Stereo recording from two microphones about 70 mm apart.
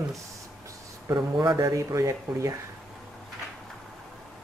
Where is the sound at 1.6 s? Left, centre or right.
Right.